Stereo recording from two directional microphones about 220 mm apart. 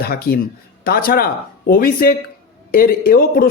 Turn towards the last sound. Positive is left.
turn(degrees=45)  # may be behind; listen again after turning